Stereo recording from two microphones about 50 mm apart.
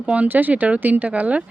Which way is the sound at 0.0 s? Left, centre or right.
Right.